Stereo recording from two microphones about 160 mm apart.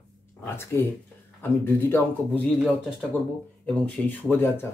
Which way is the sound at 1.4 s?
15° left (ahead or behind).